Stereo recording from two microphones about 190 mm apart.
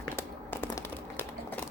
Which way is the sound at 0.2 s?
10° left (ahead or behind).